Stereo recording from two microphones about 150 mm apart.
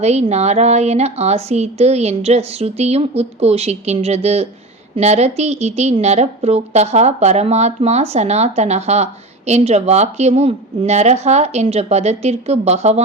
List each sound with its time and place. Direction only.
0.0 s a woman's voice: 45° right (ahead or behind)